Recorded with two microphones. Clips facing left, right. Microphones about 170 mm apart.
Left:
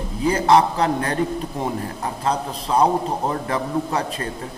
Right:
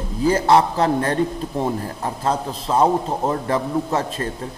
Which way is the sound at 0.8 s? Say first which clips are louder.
Right 2 dB; 30° right (ahead or behind).